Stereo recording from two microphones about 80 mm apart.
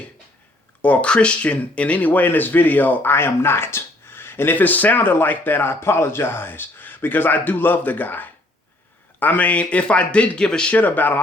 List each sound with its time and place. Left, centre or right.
0.8 s speech: centre
10.8 s speech: left